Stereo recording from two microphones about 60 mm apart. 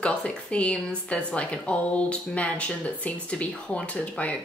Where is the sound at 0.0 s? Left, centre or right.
Centre.